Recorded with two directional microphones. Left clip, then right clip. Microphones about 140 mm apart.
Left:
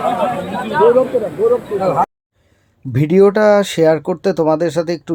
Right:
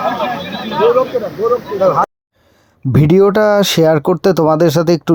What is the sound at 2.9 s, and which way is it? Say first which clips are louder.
Speech: right 1 dB; 40° right (ahead or behind).